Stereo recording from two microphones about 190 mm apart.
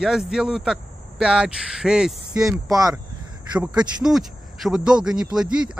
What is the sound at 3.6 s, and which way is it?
Speech, 5° right (ahead or behind).